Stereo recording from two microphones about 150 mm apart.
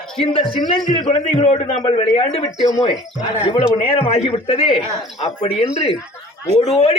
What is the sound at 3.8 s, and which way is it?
A man's voice, 40° left (ahead or behind).